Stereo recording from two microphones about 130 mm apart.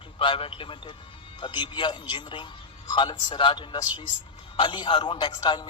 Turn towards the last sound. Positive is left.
turn(degrees=35)  # may be behind; listen again after turning